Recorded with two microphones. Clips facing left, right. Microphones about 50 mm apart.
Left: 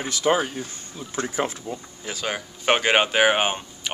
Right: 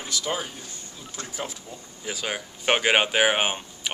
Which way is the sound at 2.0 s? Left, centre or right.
Centre.